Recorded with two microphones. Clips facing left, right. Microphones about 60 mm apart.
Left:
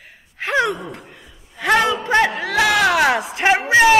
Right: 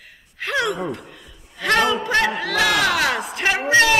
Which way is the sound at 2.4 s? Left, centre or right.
Centre.